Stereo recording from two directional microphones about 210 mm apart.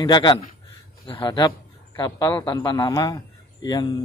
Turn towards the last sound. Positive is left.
turn(degrees=20)  # may be behind; listen again after turning